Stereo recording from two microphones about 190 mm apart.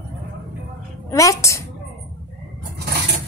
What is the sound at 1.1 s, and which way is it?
Speech, 15° left (ahead or behind).